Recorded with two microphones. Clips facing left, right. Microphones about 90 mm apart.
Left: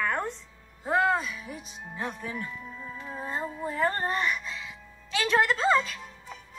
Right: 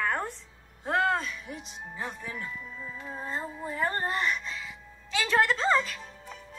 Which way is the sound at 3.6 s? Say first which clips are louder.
Left 4 dB; 35° left (ahead or behind).